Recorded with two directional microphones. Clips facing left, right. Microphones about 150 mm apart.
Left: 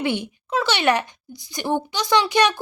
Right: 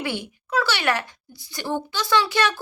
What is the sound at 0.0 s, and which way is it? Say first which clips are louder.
A child's voice: left 5 dB; 20° left (ahead or behind).